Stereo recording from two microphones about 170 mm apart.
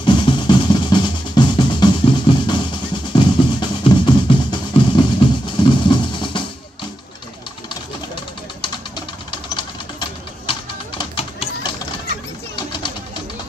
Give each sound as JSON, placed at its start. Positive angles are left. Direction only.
{"t": 0.0, "sound": "drum", "side_deg": 30}
{"t": 3.1, "sound": "music", "side_deg": 30}
{"t": 5.6, "sound": "drum", "side_deg": 25}
{"t": 8.5, "sound": "a sound", "side_deg": 30}
{"t": 12.5, "sound": "pigeon", "side_deg": 30}